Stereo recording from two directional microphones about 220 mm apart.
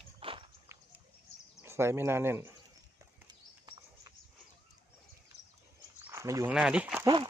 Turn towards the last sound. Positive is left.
turn(degrees=-20)  # may be behind; listen again after turning